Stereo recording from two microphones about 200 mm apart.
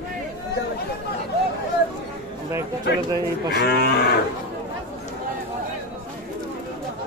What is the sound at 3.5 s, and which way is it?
Cattle, 55° left (ahead or behind).